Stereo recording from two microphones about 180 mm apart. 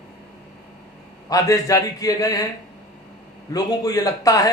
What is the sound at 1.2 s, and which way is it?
A man's voice, 20° left (ahead or behind).